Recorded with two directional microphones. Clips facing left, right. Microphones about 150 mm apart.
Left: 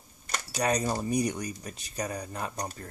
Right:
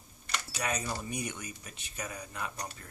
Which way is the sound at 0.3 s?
40° left (ahead or behind).